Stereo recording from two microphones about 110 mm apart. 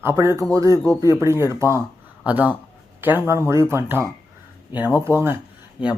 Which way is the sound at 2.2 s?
15° right (ahead or behind).